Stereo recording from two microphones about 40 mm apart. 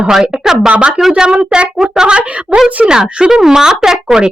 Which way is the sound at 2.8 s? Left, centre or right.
Right.